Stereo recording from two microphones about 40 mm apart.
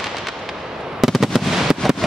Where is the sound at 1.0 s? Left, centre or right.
Centre.